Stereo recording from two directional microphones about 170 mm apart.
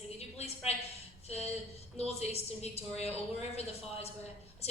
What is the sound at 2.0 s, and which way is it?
A woman's voice, 40° left (ahead or behind).